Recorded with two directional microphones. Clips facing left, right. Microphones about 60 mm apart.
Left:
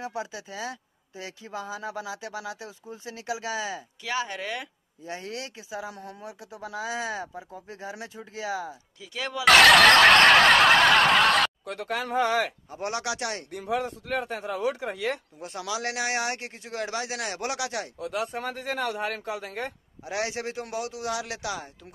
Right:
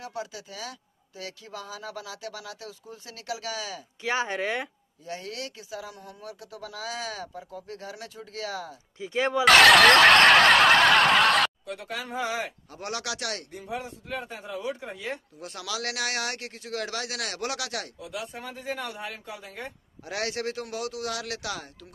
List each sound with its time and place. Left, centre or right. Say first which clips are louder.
0.0 s speech: left 2 dB; left
4.0 s speech: right 4 dB; right
5.0 s speech: left 1 dB; left
9.0 s speech: right 7 dB; right
9.4 s snicker: even; centre
11.6 s a man's voice: left 4 dB; left
12.7 s speech: left 3 dB; left
13.5 s a man's voice: left 6 dB; left
15.3 s speech: left 2 dB; left
17.9 s a man's voice: left 6 dB; left
20.1 s a man's voice: even; centre